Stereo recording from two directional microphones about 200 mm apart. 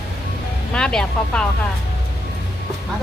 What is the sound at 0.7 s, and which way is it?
Speech, 5° left (ahead or behind).